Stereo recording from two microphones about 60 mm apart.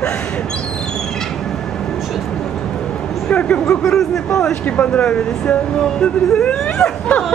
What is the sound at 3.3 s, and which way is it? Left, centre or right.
Speech, left.